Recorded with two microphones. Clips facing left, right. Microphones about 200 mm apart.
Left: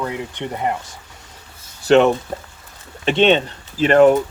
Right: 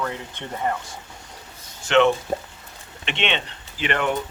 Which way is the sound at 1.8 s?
40° left (ahead or behind).